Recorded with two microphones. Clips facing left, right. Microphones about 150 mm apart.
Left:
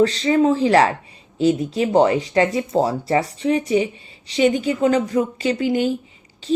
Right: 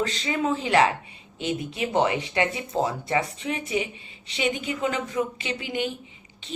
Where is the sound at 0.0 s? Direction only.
35° left (ahead or behind).